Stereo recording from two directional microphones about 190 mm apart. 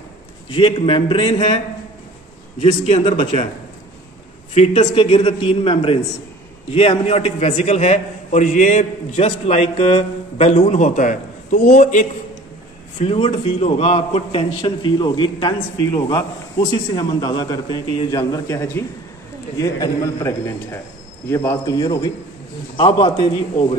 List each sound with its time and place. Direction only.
0.5 s a man's voice: 25° left (ahead or behind)
2.6 s a man's voice: 35° left (ahead or behind)
4.6 s a man's voice: 35° left (ahead or behind)